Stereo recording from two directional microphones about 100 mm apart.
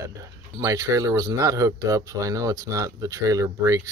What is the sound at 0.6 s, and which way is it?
Speech, 35° right (ahead or behind).